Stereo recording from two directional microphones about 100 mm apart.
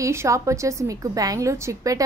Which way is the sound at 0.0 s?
30° right (ahead or behind).